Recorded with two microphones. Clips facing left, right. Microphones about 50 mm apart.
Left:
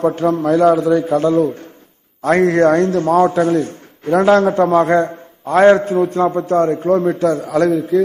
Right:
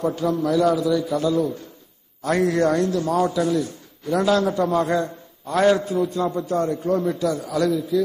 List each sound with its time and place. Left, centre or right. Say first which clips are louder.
0.0 s a man's voice: left 6 dB; left